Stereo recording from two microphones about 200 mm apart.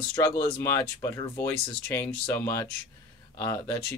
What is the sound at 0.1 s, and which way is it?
Speech, 20° left (ahead or behind).